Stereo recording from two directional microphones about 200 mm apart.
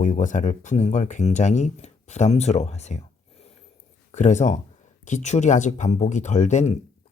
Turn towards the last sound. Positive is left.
turn(degrees=35)  # may be behind; listen again after turning